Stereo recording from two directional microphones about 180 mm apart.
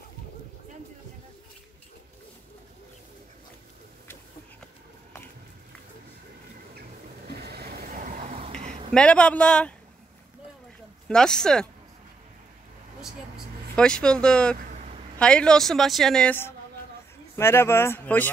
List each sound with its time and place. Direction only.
7.3 s a sound: 60° right (ahead or behind); by 8.5 s 40° right (ahead or behind)
8.9 s a woman's voice: 5° left (ahead or behind)
11.1 s a woman's voice: 5° left (ahead or behind)
13.7 s a woman's voice: 5° left (ahead or behind)